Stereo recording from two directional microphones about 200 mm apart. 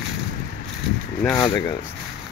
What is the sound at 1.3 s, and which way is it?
Speech, 15° left (ahead or behind).